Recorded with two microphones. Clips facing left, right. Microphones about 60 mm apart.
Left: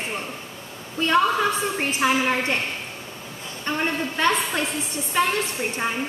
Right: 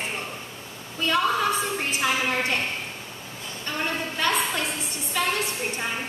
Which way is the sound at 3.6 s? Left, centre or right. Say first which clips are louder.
Left 4 dB; left.